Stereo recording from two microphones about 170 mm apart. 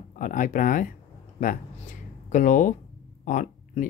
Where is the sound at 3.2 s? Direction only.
45° left (ahead or behind).